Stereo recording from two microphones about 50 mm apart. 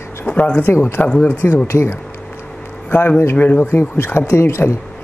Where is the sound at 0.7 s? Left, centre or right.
Left.